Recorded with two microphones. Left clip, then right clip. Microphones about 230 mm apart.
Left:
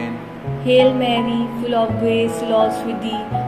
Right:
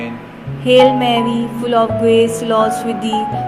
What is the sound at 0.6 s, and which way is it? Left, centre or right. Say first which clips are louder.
Music: right 4 dB; right.